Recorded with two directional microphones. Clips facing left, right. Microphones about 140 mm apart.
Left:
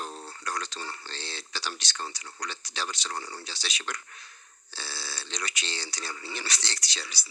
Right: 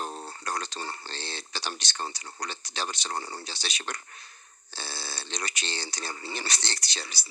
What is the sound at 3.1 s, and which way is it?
Speech, 25° right (ahead or behind).